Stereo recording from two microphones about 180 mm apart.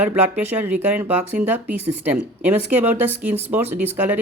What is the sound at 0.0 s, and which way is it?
Speech, 10° right (ahead or behind).